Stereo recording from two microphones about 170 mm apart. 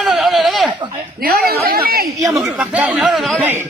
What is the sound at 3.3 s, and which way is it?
Speech, 10° right (ahead or behind).